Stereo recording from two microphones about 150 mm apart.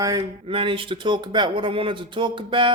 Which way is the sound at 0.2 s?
35° right (ahead or behind).